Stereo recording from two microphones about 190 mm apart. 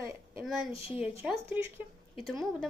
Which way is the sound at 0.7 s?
30° left (ahead or behind).